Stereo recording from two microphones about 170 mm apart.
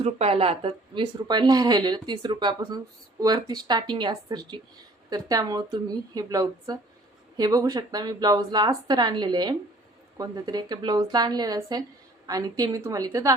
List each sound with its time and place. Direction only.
0.0 s speech: 35° right (ahead or behind); by 13.3 s 20° right (ahead or behind)